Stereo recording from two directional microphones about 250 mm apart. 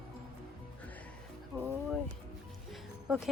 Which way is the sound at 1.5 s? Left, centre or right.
Centre.